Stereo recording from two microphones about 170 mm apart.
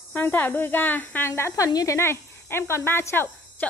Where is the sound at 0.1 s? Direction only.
10° left (ahead or behind).